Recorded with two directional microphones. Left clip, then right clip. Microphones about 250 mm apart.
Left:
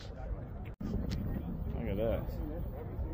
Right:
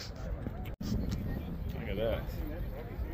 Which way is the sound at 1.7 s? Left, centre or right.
Centre.